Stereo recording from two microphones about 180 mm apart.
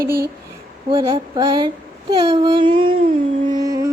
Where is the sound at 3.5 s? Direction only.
20° right (ahead or behind).